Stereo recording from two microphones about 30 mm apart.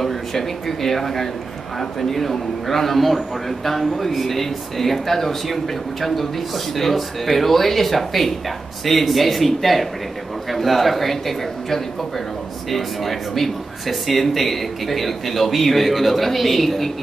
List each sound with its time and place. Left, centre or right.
0.0 s a man's voice: centre